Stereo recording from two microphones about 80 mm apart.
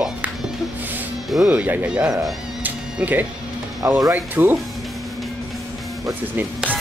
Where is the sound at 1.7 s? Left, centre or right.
Right.